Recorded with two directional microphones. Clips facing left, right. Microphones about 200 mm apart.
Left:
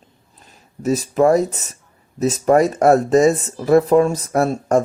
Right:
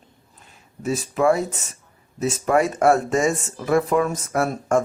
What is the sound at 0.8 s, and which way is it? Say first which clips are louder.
Speech: left 6 dB; 40° left (ahead or behind).